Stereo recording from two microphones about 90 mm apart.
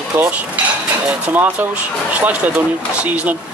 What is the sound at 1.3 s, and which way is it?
Speech, 20° right (ahead or behind).